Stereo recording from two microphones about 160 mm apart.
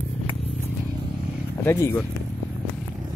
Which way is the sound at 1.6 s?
15° left (ahead or behind).